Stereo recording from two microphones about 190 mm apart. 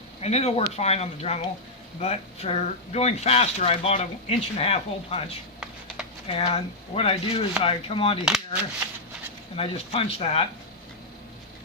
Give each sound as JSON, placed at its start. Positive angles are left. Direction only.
{"t": 0.2, "sound": "speech", "side_deg": 35}
{"t": 9.6, "sound": "speech", "side_deg": 30}